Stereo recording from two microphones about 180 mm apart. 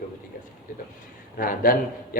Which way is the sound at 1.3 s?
50° left (ahead or behind).